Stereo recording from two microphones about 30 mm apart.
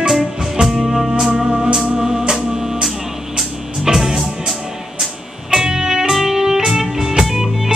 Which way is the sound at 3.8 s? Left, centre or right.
Centre.